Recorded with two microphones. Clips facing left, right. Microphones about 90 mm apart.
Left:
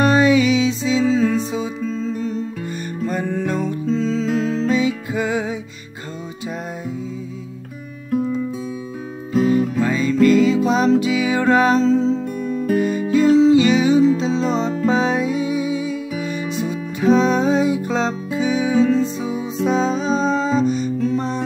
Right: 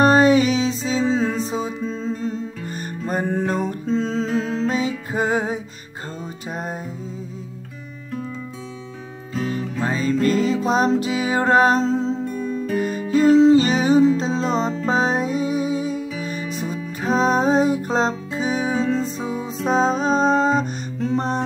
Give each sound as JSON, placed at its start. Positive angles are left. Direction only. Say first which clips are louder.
{"t": 0.0, "sound": "music", "louder": "even", "side_deg": -40}
{"t": 3.1, "sound": "music", "louder": "right 1 dB", "side_deg": -50}
{"t": 8.1, "sound": "music", "louder": "left 10 dB", "side_deg": 15}
{"t": 9.8, "sound": "music", "louder": "left 4 dB", "side_deg": -35}